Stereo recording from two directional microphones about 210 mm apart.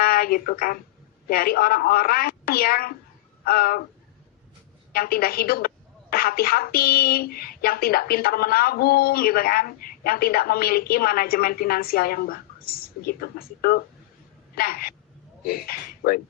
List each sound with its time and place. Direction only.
0.0 s a woman's voice: 45° left (ahead or behind)
4.9 s a woman's voice: 45° left (ahead or behind)